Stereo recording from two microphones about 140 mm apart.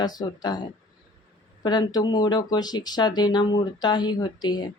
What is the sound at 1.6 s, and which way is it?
Speech, 30° left (ahead or behind).